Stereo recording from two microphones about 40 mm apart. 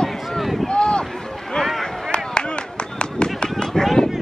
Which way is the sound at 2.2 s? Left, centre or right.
Left.